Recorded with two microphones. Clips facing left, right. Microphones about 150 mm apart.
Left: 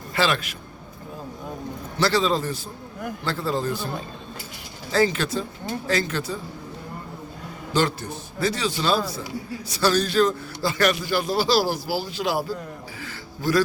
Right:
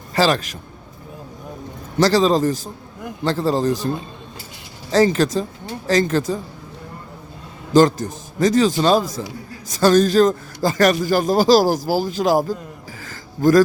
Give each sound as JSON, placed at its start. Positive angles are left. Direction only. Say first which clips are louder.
{"t": 0.1, "sound": "a man's voice", "louder": "right 6 dB", "side_deg": -40}
{"t": 2.0, "sound": "a man's voice", "louder": "right 7 dB", "side_deg": -40}
{"t": 4.9, "sound": "a man's voice", "louder": "right 6 dB", "side_deg": -40}
{"t": 7.7, "sound": "a man's voice", "louder": "right 10 dB", "side_deg": -40}
{"t": 13.0, "sound": "a sound", "louder": "right 15 dB", "side_deg": -45}